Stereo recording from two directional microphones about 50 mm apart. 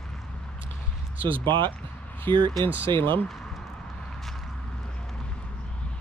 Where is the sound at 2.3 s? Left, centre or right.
Left.